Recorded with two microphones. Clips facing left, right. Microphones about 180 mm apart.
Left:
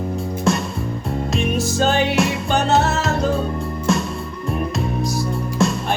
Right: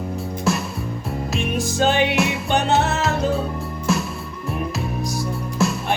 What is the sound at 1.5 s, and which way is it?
Music, 15° right (ahead or behind).